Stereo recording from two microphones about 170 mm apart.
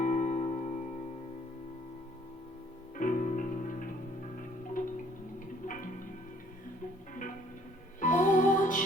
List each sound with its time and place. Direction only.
0.0 s music: 45° left (ahead or behind)
3.0 s music: 50° left (ahead or behind)
8.0 s music: 50° left (ahead or behind)